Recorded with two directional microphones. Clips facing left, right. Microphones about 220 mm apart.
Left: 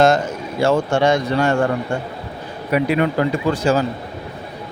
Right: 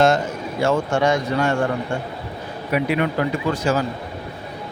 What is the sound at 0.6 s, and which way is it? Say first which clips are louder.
Speech: left 3 dB; 30° left (ahead or behind).